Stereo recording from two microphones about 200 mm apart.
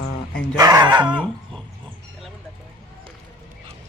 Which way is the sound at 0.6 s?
20° right (ahead or behind).